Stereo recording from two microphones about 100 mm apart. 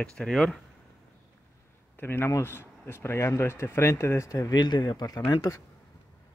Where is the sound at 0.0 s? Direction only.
5° left (ahead or behind).